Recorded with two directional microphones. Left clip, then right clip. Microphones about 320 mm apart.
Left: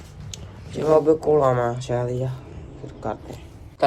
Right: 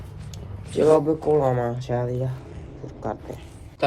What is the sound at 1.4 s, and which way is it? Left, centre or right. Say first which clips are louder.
Speech: left 3 dB; right.